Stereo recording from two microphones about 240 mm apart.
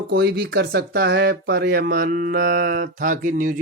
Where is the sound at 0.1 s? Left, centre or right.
Right.